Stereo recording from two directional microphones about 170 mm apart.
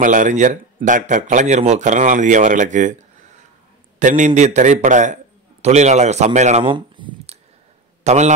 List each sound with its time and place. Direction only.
0.0 s speech: 50° right (ahead or behind)
4.0 s a man's voice: 45° right (ahead or behind)
6.6 s a sound: 30° right (ahead or behind)
8.0 s a man's voice: 40° right (ahead or behind)